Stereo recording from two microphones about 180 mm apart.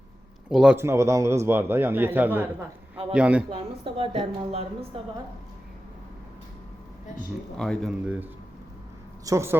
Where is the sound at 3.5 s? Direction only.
30° right (ahead or behind).